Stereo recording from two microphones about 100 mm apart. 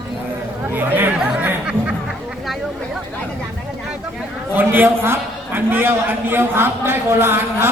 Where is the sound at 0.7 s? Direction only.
20° right (ahead or behind).